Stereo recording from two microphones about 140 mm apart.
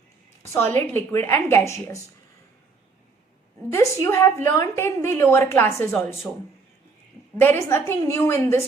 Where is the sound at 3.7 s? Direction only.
20° left (ahead or behind).